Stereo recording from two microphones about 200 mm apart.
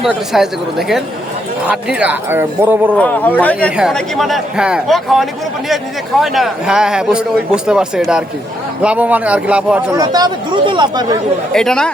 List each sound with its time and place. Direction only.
0.0 s speech: centre (ahead or behind)
3.0 s speech: 10° left (ahead or behind)
10.0 s speech: 20° right (ahead or behind)
11.5 s speech: 5° left (ahead or behind)